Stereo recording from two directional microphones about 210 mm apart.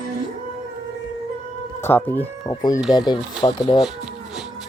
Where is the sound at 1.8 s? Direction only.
10° left (ahead or behind).